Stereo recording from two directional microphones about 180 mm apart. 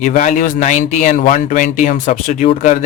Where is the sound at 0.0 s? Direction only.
45° left (ahead or behind).